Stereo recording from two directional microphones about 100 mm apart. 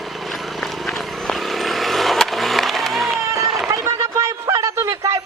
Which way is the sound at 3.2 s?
30° right (ahead or behind).